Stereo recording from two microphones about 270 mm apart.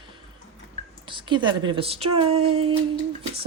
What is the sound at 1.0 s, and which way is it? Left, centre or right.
Speech, centre.